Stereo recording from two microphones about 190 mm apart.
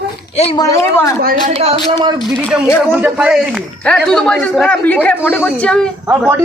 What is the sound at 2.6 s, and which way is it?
Speech, 10° left (ahead or behind).